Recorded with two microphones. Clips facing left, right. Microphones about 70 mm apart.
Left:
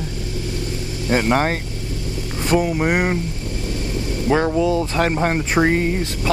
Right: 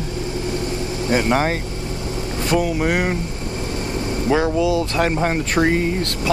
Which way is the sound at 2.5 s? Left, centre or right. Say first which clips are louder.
Left 1 dB; centre.